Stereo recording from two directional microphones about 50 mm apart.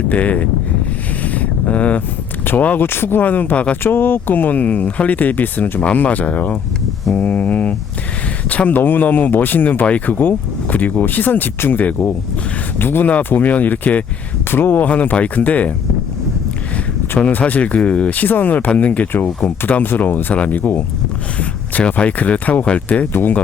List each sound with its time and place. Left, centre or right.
0.1 s speech: left
1.2 s vehicle: left
2.5 s speech: left
3.8 s speech: left
5.8 s speech: left
9.8 s speech: left
13.1 s speech: left
14.5 s speech: left
14.8 s speech: left
17.2 s speech: left
21.3 s speech: left